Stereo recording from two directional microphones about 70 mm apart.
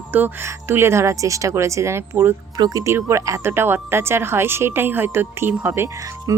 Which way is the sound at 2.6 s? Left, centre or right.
Right.